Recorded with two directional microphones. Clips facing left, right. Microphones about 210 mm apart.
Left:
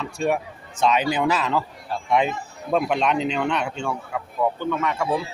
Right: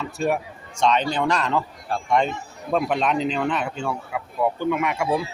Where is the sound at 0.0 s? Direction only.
Centre (ahead or behind).